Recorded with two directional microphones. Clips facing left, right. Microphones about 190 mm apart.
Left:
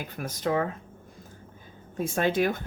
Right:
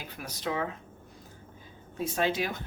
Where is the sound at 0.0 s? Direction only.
50° left (ahead or behind).